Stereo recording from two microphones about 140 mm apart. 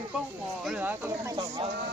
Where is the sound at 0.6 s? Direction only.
10° right (ahead or behind).